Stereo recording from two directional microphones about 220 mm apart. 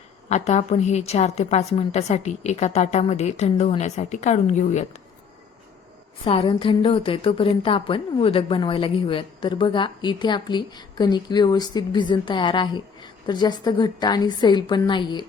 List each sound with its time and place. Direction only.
0.3 s a woman's voice: 30° left (ahead or behind)
6.2 s a woman's voice: 25° left (ahead or behind)